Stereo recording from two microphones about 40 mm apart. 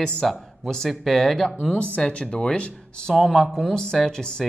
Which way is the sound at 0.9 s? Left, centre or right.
Centre.